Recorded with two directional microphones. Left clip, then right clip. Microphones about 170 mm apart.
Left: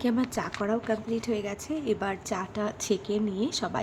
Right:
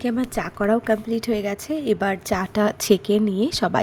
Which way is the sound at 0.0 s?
15° right (ahead or behind).